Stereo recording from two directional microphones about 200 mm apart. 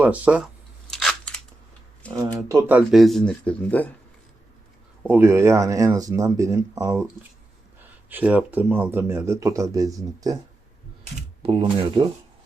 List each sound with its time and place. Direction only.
0.0 s a sound: 5° right (ahead or behind)
2.3 s speech: 15° right (ahead or behind); by 3.8 s 10° left (ahead or behind)
5.0 s speech: 10° right (ahead or behind)
8.1 s speech: 5° right (ahead or behind)
11.4 s speech: 25° right (ahead or behind)